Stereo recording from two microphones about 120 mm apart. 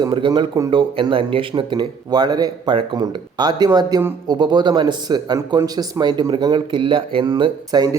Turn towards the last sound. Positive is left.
turn(degrees=-35)  # may be behind; listen again after turning